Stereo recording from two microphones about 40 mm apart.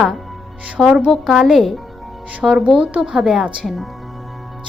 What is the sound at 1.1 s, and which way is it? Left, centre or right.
Speech, centre.